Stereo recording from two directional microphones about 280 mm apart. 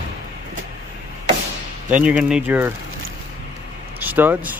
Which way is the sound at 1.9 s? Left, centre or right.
Centre.